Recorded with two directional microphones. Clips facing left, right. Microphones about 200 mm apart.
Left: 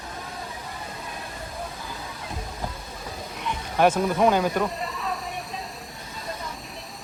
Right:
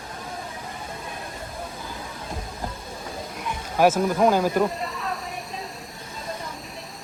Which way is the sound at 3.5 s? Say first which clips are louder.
Right 1 dB; 5° right (ahead or behind).